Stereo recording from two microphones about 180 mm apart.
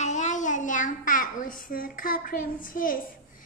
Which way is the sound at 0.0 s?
40° left (ahead or behind).